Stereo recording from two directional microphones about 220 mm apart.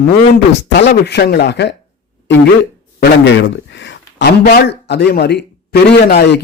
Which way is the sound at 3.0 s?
55° left (ahead or behind).